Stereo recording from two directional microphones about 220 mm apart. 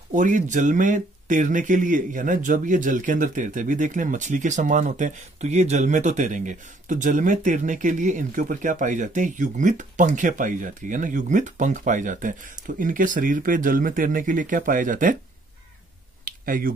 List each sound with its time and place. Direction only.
0.1 s speech: 35° right (ahead or behind)
16.3 s finger snapping: 40° right (ahead or behind)